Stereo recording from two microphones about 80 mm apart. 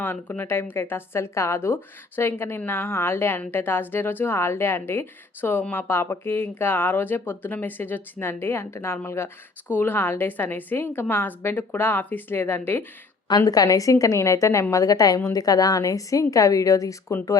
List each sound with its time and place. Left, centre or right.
0.0 s speech: left
13.4 s a woman's voice: left